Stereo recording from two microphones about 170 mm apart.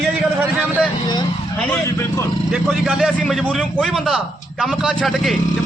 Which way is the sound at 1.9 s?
15° left (ahead or behind).